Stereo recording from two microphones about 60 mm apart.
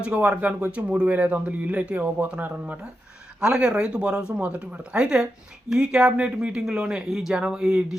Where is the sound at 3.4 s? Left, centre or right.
Centre.